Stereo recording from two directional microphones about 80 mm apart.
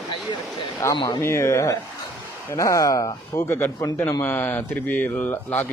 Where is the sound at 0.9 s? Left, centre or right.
Left.